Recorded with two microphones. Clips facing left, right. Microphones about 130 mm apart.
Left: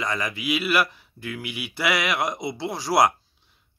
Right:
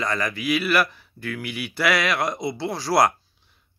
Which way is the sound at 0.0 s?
15° left (ahead or behind).